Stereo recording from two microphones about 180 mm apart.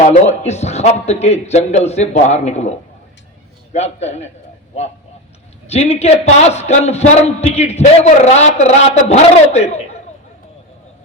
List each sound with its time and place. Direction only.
0.2 s a man's voice: 40° left (ahead or behind)
5.6 s a man's voice: 35° left (ahead or behind)